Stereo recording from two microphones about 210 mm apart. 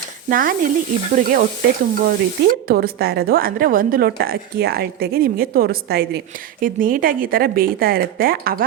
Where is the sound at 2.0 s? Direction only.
45° right (ahead or behind).